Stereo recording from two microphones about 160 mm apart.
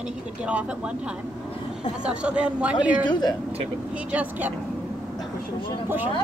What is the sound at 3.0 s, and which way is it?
Speech, 25° left (ahead or behind).